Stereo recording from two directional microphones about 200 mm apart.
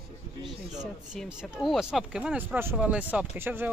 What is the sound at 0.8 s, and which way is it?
Speech, 5° right (ahead or behind).